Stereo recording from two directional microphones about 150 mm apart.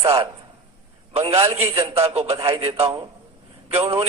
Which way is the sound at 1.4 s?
25° right (ahead or behind).